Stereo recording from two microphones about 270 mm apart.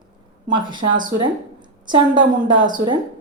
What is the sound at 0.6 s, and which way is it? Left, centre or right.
Speech, centre.